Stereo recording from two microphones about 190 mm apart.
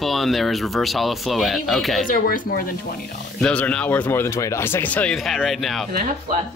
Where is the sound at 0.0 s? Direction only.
Centre (ahead or behind).